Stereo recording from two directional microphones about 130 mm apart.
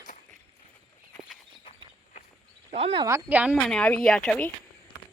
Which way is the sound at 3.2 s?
10° right (ahead or behind).